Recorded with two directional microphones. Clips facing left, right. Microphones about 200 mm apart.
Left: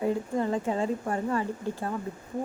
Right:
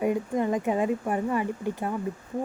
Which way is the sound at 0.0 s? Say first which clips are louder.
Right 2 dB; 15° right (ahead or behind).